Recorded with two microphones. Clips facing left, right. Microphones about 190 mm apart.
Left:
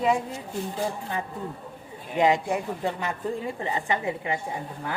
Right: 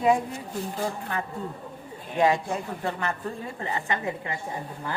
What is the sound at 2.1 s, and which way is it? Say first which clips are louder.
A woman's voice: left 1 dB; 15° left (ahead or behind).